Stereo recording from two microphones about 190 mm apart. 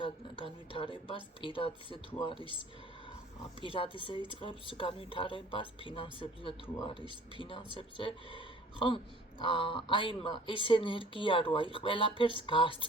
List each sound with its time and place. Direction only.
0.0 s speech: 25° left (ahead or behind)
9.4 s speech: 25° left (ahead or behind)